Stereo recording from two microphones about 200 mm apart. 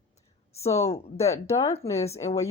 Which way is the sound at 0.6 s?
15° left (ahead or behind).